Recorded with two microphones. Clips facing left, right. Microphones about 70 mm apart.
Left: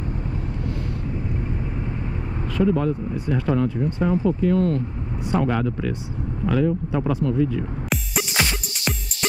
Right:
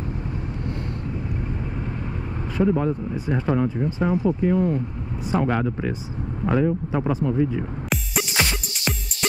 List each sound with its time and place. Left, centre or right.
2.5 s speech: centre
6.9 s speech: centre
7.9 s music: centre